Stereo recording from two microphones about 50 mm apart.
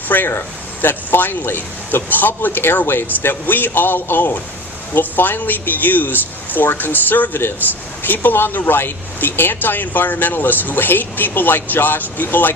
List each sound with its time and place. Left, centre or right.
0.1 s speech: left